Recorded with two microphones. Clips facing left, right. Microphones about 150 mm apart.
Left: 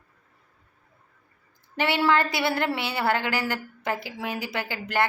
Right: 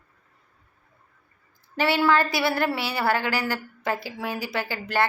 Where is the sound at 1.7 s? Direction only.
20° left (ahead or behind).